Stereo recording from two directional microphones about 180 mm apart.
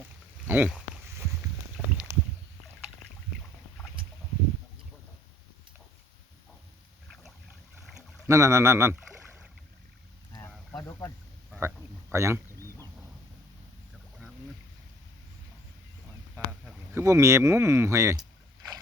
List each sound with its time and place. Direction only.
0.4 s speech: 10° right (ahead or behind)
7.1 s boat: centre (ahead or behind)
8.3 s speech: 15° right (ahead or behind)
9.0 s boat: 5° right (ahead or behind)
10.7 s a sound: 20° left (ahead or behind)
11.6 s a sound: 15° right (ahead or behind)
16.3 s speech: 10° right (ahead or behind)